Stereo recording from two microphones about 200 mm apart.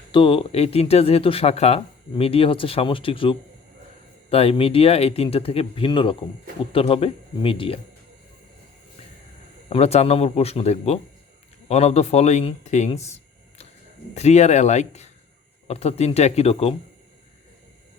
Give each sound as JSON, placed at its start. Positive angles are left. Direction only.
{"t": 0.1, "sound": "speech", "side_deg": 25}
{"t": 9.6, "sound": "speech", "side_deg": 30}